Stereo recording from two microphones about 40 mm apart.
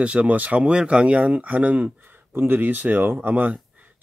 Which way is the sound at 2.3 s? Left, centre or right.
Right.